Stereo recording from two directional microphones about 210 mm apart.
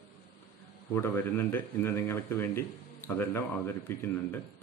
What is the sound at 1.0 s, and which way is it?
Speech, 10° left (ahead or behind).